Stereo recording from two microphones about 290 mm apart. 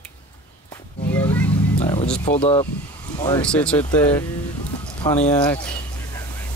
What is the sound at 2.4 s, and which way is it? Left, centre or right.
Speech, centre.